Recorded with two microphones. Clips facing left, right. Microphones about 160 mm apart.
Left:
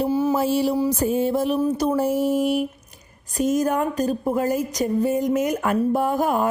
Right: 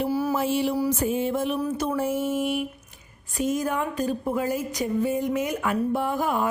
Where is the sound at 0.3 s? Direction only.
40° left (ahead or behind).